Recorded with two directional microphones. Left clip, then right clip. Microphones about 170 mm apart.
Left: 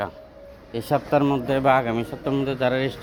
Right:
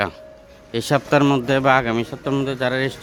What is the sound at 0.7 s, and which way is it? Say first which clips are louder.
A man's voice: right 4 dB; 50° right (ahead or behind).